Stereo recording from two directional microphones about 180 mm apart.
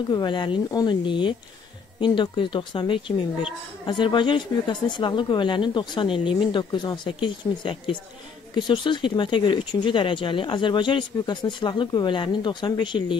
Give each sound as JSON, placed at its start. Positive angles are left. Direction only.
{"t": 0.1, "sound": "speech", "side_deg": 25}